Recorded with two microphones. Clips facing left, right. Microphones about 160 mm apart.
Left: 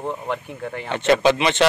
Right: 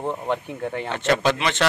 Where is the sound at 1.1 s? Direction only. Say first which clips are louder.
Left 4 dB; 10° left (ahead or behind).